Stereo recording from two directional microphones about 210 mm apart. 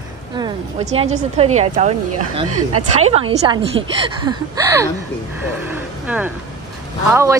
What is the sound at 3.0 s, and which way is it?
A woman's voice, 30° right (ahead or behind).